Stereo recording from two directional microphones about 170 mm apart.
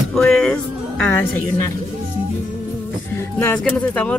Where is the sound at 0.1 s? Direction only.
5° left (ahead or behind).